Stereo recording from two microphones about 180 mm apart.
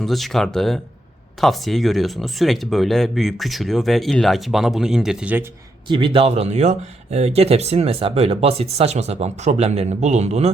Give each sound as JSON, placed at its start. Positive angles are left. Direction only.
{"t": 0.0, "sound": "speech", "side_deg": 0}
{"t": 5.9, "sound": "speech", "side_deg": -30}